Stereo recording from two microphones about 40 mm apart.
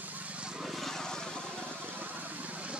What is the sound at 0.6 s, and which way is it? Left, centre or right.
Vehicle, centre.